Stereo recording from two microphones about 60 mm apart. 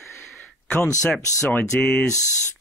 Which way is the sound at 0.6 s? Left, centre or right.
Left.